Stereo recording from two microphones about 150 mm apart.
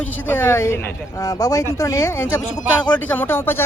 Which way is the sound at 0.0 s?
10° left (ahead or behind).